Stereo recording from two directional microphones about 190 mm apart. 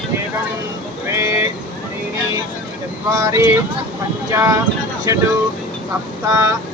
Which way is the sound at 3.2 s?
15° right (ahead or behind).